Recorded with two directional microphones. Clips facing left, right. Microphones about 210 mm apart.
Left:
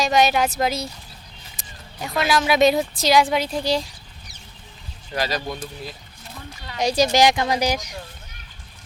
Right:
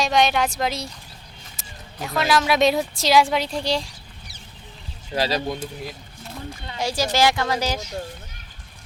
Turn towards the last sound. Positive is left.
turn(degrees=15)  # may be behind; listen again after turning